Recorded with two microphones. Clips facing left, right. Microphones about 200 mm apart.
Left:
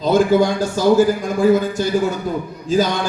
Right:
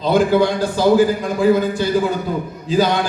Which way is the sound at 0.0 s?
45° left (ahead or behind).